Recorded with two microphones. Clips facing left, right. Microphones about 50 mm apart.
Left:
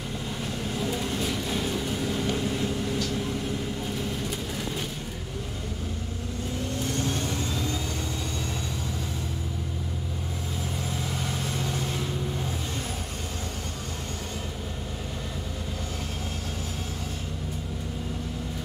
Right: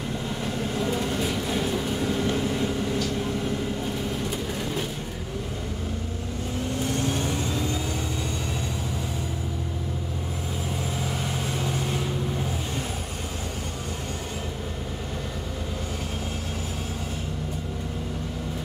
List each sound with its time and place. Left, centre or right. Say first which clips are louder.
0.4 s vehicle: right 3 dB; centre
7.0 s vehicle: right 2 dB; centre
11.2 s vehicle: right 2 dB; centre